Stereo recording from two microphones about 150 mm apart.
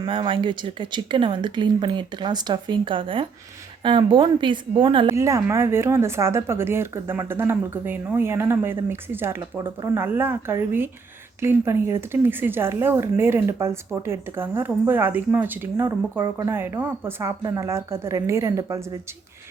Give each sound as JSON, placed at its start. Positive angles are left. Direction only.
{"t": 0.0, "sound": "speech", "side_deg": -35}
{"t": 5.1, "sound": "a woman's voice", "side_deg": -20}